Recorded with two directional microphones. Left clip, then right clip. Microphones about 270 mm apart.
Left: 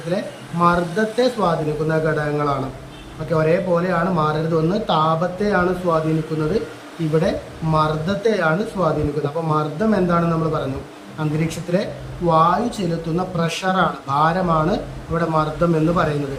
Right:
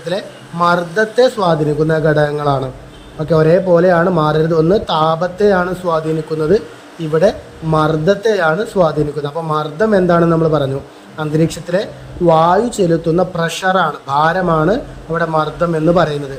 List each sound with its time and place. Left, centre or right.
0.1 s speech: centre
7.1 s speech: centre